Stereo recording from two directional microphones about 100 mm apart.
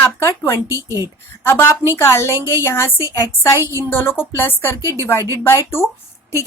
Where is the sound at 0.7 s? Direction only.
30° right (ahead or behind).